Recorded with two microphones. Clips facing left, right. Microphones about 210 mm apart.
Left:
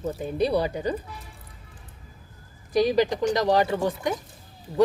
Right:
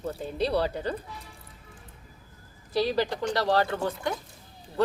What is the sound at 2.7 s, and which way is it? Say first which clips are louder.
Speech: left 5 dB; 15° left (ahead or behind).